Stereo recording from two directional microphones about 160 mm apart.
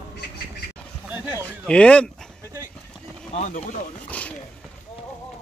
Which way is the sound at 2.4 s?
20° right (ahead or behind).